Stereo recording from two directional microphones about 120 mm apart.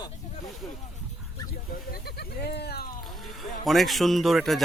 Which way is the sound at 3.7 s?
Centre (ahead or behind).